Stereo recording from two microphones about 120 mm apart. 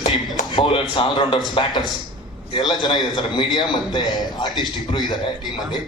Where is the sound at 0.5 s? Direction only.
45° left (ahead or behind).